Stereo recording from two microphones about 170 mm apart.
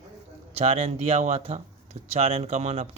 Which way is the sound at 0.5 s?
35° right (ahead or behind).